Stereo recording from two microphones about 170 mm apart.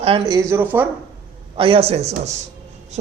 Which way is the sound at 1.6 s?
35° right (ahead or behind).